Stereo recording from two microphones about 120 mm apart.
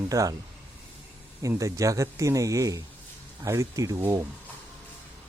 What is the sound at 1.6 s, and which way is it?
Speech, 25° right (ahead or behind).